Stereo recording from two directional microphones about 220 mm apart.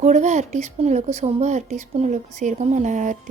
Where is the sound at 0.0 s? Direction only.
30° right (ahead or behind).